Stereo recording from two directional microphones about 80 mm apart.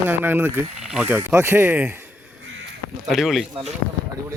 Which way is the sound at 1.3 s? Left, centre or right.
Right.